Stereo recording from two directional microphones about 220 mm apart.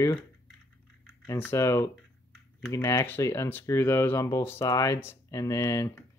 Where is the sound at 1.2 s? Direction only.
10° left (ahead or behind).